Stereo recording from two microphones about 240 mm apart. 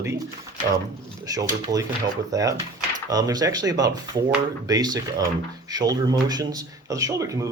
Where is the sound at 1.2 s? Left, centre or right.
Centre.